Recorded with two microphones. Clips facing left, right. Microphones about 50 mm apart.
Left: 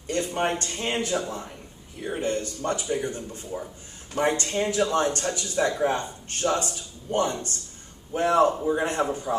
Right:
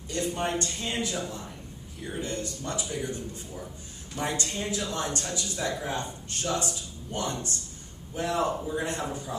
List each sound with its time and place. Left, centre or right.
0.1 s speech: left